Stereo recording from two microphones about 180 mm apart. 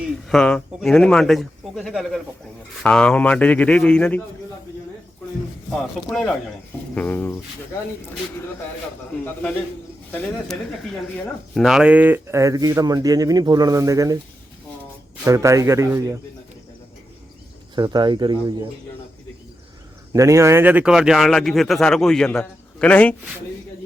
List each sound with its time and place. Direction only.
0.3 s speech: 5° left (ahead or behind)
5.7 s speech: centre (ahead or behind)
9.2 s speech: 10° left (ahead or behind)
11.5 s speech: centre (ahead or behind); by 14.2 s 20° right (ahead or behind)
15.2 s a man's voice: 15° right (ahead or behind)
17.7 s speech: 25° right (ahead or behind)
20.1 s speech: 15° right (ahead or behind); by 23.1 s 5° left (ahead or behind)